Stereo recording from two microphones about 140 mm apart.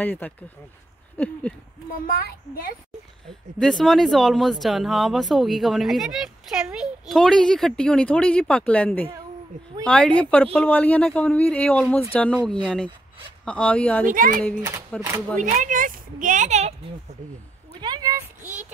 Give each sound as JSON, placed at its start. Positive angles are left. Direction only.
{"t": 0.0, "sound": "speech", "side_deg": 10}
{"t": 1.1, "sound": "a sound", "side_deg": 10}
{"t": 2.0, "sound": "a child's voice", "side_deg": 90}
{"t": 3.5, "sound": "speech", "side_deg": 0}
{"t": 14.0, "sound": "speech", "side_deg": -75}
{"t": 14.9, "sound": "speech", "side_deg": 5}
{"t": 15.3, "sound": "a woman's voice", "side_deg": -65}
{"t": 17.7, "sound": "speech", "side_deg": -30}
{"t": 18.4, "sound": "speech", "side_deg": -10}